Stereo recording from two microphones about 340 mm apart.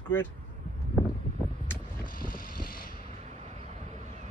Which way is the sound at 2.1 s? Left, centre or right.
Left.